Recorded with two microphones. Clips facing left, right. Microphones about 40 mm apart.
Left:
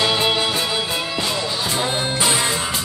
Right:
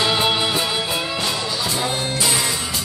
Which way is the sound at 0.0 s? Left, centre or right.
Centre.